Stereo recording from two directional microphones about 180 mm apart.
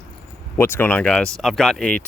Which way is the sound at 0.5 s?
10° left (ahead or behind).